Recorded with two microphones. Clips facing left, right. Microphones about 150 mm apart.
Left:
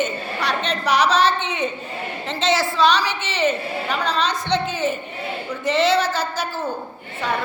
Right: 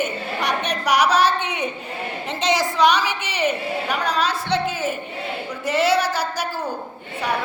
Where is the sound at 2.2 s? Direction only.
15° right (ahead or behind).